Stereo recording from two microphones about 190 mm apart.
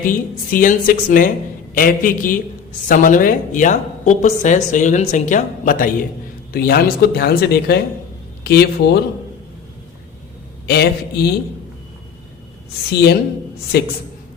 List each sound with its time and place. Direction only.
0.0 s a woman's voice: 45° left (ahead or behind)
6.5 s speech: 55° left (ahead or behind)
10.7 s speech: 60° left (ahead or behind)
12.9 s speech: 55° left (ahead or behind)